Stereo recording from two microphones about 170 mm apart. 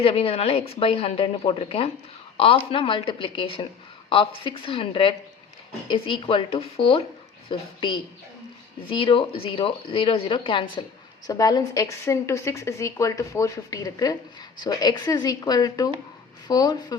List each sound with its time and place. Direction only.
0.0 s a woman's voice: 35° left (ahead or behind)